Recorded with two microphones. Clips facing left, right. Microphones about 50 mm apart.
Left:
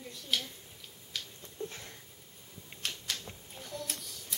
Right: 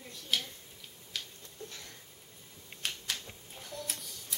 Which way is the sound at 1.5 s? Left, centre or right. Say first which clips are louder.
Left 6 dB; left.